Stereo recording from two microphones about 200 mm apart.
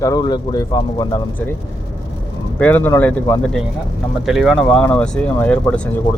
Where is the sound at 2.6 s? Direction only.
10° left (ahead or behind).